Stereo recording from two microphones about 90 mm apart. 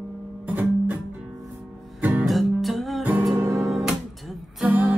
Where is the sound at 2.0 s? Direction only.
15° right (ahead or behind).